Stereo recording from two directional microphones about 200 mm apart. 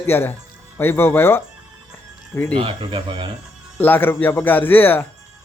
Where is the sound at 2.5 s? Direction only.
25° right (ahead or behind).